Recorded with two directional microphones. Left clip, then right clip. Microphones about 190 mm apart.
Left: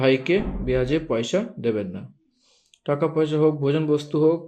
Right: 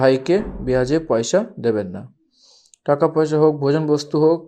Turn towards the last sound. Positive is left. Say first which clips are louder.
# right 4 dB
turn(degrees=-40)  # may be behind; listen again after turning